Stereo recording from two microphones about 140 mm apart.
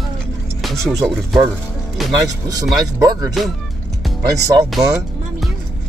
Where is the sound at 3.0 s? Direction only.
25° right (ahead or behind).